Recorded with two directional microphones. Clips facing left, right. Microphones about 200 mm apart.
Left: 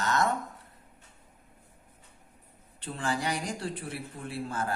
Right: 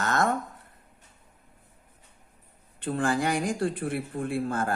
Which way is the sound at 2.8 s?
50° right (ahead or behind).